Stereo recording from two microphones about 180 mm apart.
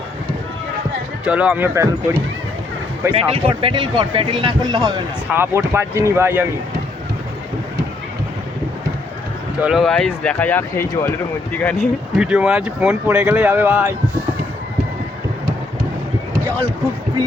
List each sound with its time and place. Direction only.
1.2 s speech: 5° right (ahead or behind)
3.1 s speech: 30° right (ahead or behind); by 6.5 s 10° right (ahead or behind)
9.6 s speech: 5° right (ahead or behind)
12.1 s speech: 5° right (ahead or behind)